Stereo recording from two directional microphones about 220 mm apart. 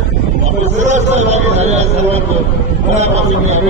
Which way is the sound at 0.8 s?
30° right (ahead or behind).